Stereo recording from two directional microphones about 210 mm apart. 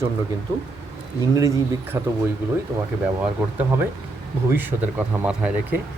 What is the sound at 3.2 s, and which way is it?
Speech, 10° right (ahead or behind).